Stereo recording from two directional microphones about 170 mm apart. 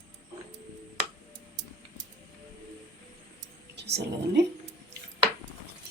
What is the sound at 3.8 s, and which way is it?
Speech, 80° right.